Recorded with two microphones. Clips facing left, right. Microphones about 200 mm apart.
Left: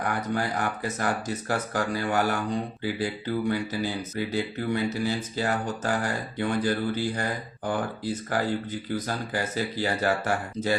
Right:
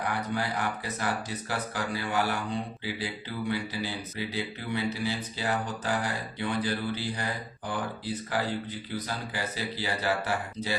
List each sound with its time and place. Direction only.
0.0 s speech: 45° left (ahead or behind)